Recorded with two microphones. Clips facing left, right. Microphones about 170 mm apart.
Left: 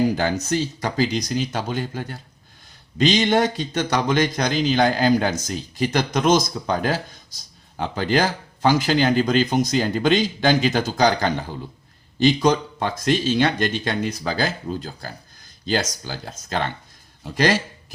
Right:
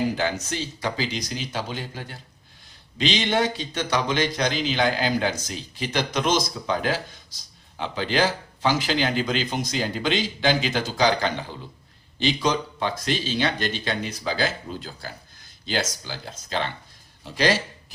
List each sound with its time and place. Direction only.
0.4 s speech: 45° left (ahead or behind)